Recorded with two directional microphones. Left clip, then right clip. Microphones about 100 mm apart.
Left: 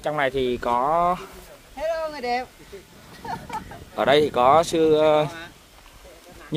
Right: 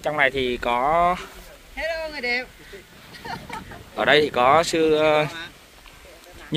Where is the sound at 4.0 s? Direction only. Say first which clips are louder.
Even; 25° left (ahead or behind).